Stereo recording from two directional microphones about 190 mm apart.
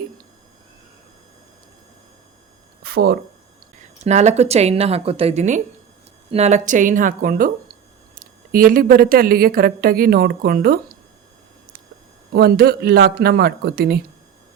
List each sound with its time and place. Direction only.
2.8 s speech: 55° right (ahead or behind)
4.0 s a woman's voice: 35° right (ahead or behind)
12.3 s speech: 55° right (ahead or behind)